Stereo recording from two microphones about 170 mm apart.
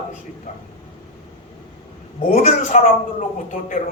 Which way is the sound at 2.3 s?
40° left (ahead or behind).